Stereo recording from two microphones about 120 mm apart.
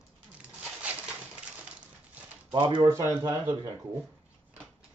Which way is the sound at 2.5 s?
40° right (ahead or behind).